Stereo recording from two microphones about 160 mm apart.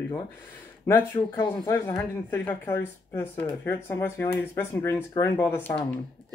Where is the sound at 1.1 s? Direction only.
25° left (ahead or behind).